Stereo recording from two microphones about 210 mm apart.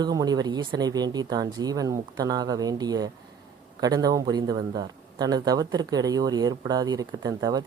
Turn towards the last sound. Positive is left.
turn(degrees=-20)  # may be behind; listen again after turning